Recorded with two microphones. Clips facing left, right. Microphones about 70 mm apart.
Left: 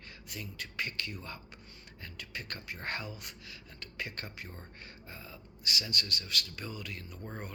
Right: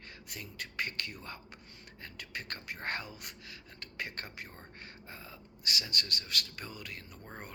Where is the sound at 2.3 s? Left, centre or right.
Right.